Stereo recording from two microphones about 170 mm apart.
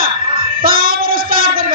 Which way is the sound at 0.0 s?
55° right (ahead or behind).